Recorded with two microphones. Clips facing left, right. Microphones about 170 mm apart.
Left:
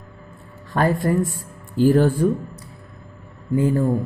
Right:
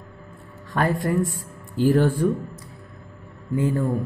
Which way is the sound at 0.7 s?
35° left (ahead or behind).